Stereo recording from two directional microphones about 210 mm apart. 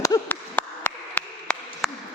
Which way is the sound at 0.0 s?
10° left (ahead or behind).